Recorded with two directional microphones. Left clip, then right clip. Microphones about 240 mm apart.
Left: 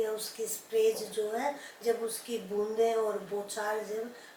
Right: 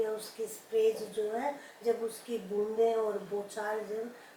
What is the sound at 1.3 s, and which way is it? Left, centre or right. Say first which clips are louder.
A woman's voice: left 1 dB; centre.